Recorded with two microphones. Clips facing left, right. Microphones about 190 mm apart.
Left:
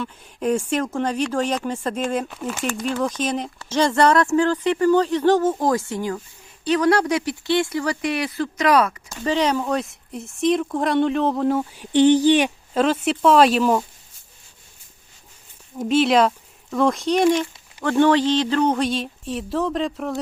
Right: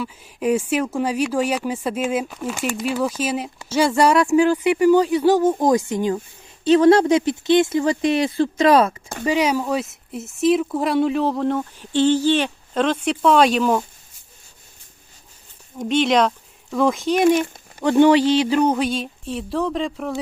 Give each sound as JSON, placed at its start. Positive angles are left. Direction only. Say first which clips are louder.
{"t": 0.0, "sound": "speech", "louder": "right 1 dB", "side_deg": -5}
{"t": 9.2, "sound": "speech", "louder": "right 1 dB", "side_deg": -10}
{"t": 11.9, "sound": "speech", "louder": "left 3 dB", "side_deg": 15}
{"t": 15.8, "sound": "speech", "louder": "left 1 dB", "side_deg": 5}
{"t": 17.8, "sound": "speech", "louder": "right 3 dB", "side_deg": -15}